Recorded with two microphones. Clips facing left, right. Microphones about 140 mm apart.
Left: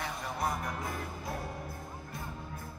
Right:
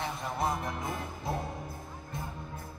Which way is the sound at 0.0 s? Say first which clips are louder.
Right 2 dB; 25° right (ahead or behind).